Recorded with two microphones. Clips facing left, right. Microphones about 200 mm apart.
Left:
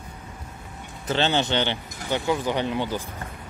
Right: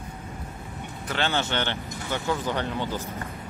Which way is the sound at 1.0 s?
25° left (ahead or behind).